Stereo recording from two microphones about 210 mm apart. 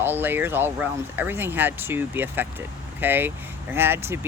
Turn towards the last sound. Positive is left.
turn(degrees=-10)  # may be behind; listen again after turning